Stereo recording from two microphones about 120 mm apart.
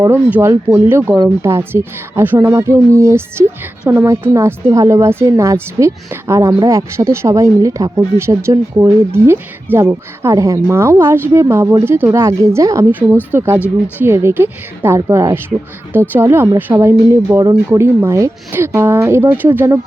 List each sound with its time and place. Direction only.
0.3 s speech: 15° right (ahead or behind)